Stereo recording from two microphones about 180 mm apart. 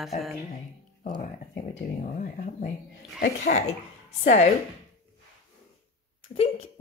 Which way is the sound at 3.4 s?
40° left (ahead or behind).